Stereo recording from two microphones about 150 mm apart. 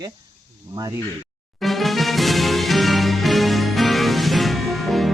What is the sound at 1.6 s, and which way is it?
Music, centre (ahead or behind).